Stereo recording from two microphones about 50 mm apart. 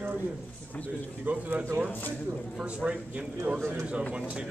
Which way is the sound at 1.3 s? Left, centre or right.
Right.